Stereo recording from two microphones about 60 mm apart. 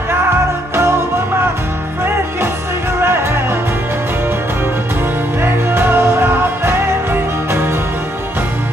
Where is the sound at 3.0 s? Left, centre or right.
Right.